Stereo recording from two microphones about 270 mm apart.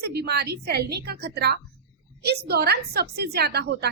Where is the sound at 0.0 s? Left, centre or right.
Right.